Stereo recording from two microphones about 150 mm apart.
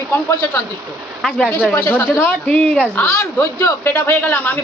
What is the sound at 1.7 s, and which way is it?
A woman's voice, 15° left (ahead or behind).